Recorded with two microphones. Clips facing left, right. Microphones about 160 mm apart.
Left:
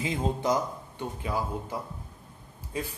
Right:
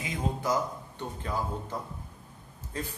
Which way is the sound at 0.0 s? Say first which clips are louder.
Left 4 dB; 20° left (ahead or behind).